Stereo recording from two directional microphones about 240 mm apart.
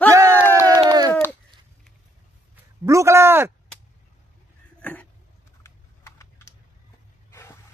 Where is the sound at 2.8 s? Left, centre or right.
Centre.